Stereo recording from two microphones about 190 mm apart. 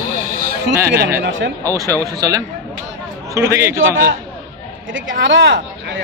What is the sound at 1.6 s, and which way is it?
A man's voice, 15° right (ahead or behind).